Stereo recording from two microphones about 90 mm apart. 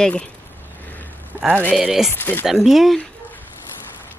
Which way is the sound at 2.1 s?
25° left (ahead or behind).